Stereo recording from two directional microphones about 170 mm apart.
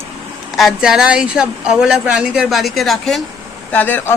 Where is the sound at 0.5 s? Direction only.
Centre (ahead or behind).